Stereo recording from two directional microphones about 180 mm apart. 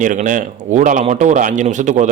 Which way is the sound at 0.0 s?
45° right (ahead or behind).